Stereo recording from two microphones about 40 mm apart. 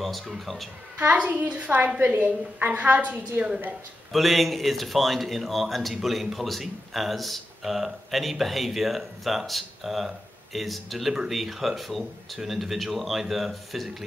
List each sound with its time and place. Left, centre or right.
0.0 s speech: centre
1.1 s a woman's voice: right
2.1 s a woman's voice: right
4.1 s speech: centre